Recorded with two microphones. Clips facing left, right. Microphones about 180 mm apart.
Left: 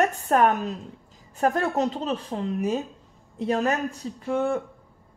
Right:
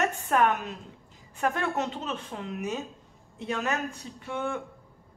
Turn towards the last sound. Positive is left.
turn(degrees=35)  # may be behind; listen again after turning